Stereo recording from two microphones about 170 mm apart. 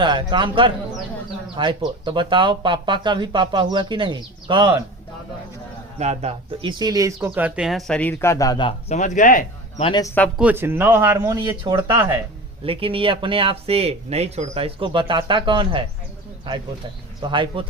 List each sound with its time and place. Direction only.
0.0 s speech: 30° right (ahead or behind)
6.0 s speech: 40° right (ahead or behind)
6.6 s speech: 25° right (ahead or behind); by 8.7 s 25° left (ahead or behind)
8.9 s speech: 45° left (ahead or behind)
9.8 s speech: 25° left (ahead or behind)
10.3 s speech: 10° right (ahead or behind)
11.3 s speech: 25° right (ahead or behind)
12.6 s speech: 35° right (ahead or behind)
17.2 s speech: 25° right (ahead or behind)